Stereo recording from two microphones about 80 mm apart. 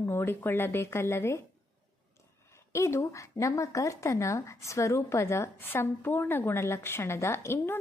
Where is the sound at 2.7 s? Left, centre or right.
Left.